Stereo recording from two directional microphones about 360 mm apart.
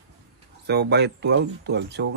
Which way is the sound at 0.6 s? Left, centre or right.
Right.